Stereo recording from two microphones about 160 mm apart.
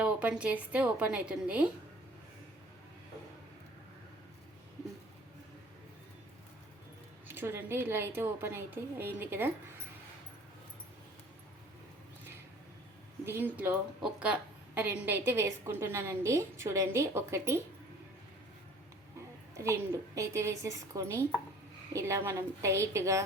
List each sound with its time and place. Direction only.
0.0 s a woman's voice: 10° right (ahead or behind)
7.3 s a woman's voice: 15° right (ahead or behind)
13.2 s a woman's voice: 15° right (ahead or behind)
19.5 s a woman's voice: 20° right (ahead or behind)